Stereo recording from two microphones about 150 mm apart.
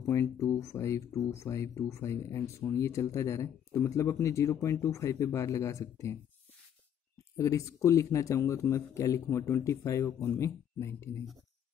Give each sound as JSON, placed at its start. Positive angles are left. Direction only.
{"t": 0.1, "sound": "speech", "side_deg": 20}
{"t": 7.3, "sound": "speech", "side_deg": 20}